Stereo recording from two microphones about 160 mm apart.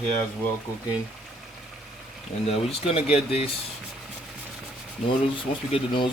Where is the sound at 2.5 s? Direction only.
40° left (ahead or behind).